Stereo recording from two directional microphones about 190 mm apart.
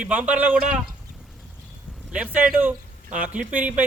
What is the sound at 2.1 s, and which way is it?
Speech, 5° right (ahead or behind).